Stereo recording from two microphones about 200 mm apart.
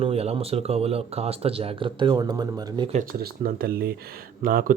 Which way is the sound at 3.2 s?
45° right (ahead or behind).